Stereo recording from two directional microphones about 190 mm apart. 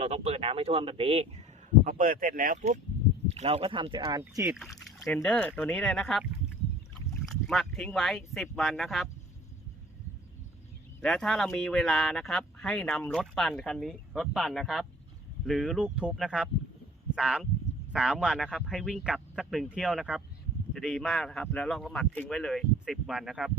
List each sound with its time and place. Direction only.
0.0 s speech: 30° right (ahead or behind)
1.8 s speech: 45° right (ahead or behind); by 4.2 s 25° right (ahead or behind)
4.2 s speech: 10° right (ahead or behind)
4.6 s speech: centre (ahead or behind)
7.3 s speech: centre (ahead or behind)
11.0 s speech: centre (ahead or behind)